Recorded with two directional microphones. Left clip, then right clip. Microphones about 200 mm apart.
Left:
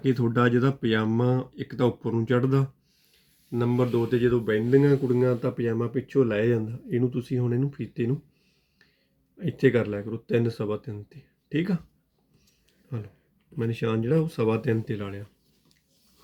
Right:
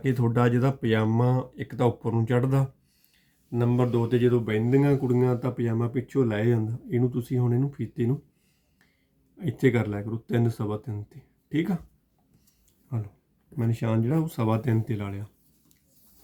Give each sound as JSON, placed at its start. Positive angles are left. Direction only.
{"t": 0.0, "sound": "speech", "side_deg": -50}
{"t": 9.4, "sound": "speech", "side_deg": -45}
{"t": 13.6, "sound": "speech", "side_deg": -40}